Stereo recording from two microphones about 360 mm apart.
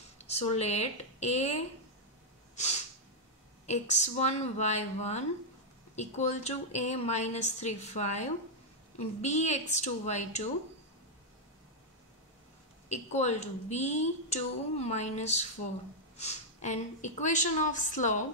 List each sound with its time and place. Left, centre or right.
0.2 s speech: centre
3.6 s a woman's voice: centre
12.8 s a woman's voice: centre